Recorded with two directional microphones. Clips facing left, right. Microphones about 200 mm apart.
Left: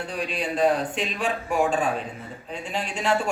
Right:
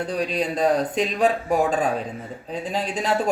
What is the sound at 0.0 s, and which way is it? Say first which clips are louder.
A man's voice: right 5 dB; 35° right (ahead or behind).